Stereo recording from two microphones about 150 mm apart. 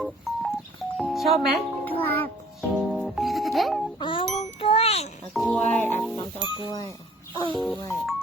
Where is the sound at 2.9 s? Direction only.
Centre (ahead or behind).